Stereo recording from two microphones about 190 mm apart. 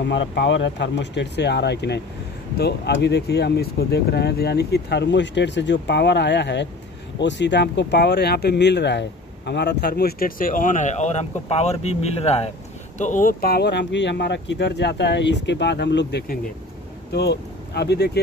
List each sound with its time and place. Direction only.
0.0 s speech: 65° left (ahead or behind)